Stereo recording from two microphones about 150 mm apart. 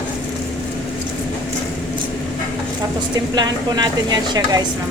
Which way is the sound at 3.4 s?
30° right (ahead or behind).